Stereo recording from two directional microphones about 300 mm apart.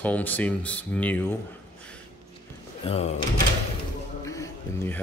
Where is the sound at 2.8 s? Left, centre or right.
Centre.